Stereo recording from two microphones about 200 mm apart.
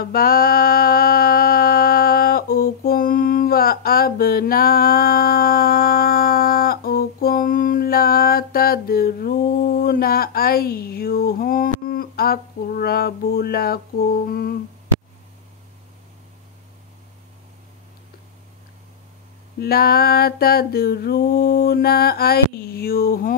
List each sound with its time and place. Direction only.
0.0 s mantra: 50° left (ahead or behind)
11.9 s a sound: 50° left (ahead or behind)
14.2 s mantra: 50° left (ahead or behind)
19.6 s mantra: 50° left (ahead or behind)